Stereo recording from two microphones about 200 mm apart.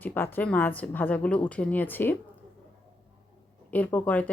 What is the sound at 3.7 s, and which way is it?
Speech, 10° left (ahead or behind).